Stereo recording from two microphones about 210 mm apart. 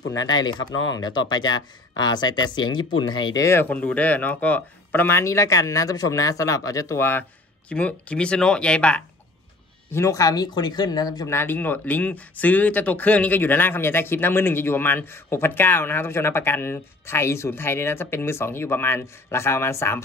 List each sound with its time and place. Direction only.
0.1 s speech: 20° left (ahead or behind)